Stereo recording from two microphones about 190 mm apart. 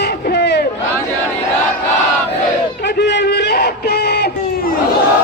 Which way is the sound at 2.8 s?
65° left (ahead or behind).